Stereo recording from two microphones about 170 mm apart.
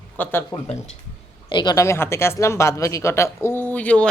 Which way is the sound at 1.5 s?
25° left (ahead or behind).